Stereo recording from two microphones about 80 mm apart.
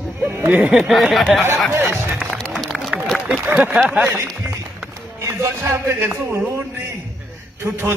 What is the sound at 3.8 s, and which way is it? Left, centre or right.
Speech, centre.